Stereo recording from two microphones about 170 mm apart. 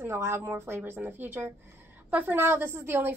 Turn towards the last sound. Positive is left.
turn(degrees=-15)  # may be behind; listen again after turning